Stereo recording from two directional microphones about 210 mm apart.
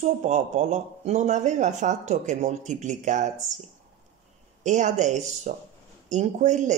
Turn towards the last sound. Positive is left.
turn(degrees=-35)  # may be behind; listen again after turning